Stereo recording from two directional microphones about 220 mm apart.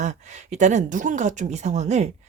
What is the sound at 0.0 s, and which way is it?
Speech, 30° right (ahead or behind).